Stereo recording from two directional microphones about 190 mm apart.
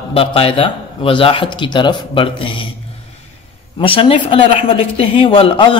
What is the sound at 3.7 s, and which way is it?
Speech, 30° left (ahead or behind).